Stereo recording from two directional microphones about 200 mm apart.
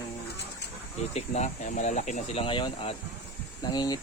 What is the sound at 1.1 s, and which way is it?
Speech, 35° left (ahead or behind).